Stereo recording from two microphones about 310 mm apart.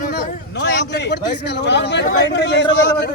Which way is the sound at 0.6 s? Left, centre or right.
Left.